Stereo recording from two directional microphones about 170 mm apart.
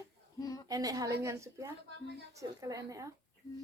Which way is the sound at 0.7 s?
20° right (ahead or behind).